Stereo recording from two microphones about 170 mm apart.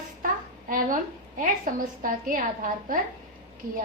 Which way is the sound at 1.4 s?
50° right (ahead or behind).